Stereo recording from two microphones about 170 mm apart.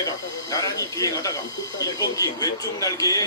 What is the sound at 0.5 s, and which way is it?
Speech, 20° left (ahead or behind).